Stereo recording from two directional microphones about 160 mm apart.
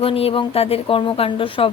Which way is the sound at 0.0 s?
35° left (ahead or behind).